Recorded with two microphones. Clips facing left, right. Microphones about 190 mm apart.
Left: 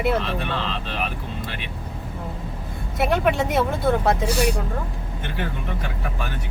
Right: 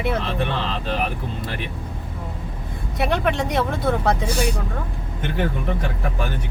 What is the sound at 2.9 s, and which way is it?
Speech, centre (ahead or behind).